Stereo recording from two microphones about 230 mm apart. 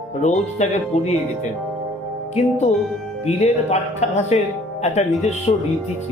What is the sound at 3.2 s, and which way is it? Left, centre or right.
Speech, left.